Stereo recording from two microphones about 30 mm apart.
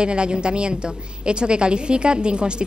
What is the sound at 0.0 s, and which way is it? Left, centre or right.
Speech, right.